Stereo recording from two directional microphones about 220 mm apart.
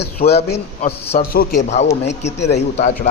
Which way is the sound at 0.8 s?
30° left (ahead or behind).